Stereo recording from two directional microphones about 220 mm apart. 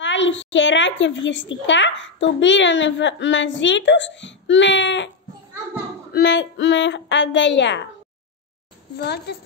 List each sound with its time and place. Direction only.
0.0 s a woman's voice: 55° left (ahead or behind)
6.1 s a woman's voice: 55° left (ahead or behind)
8.9 s a woman's voice: 50° left (ahead or behind)